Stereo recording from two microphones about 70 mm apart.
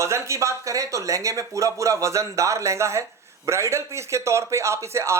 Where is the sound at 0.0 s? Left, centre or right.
Right.